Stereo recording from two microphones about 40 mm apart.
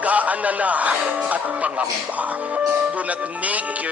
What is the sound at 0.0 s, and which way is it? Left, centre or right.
Music, right.